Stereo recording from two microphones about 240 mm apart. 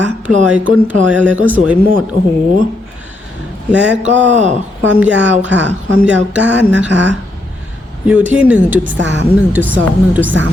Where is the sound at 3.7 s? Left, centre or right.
Right.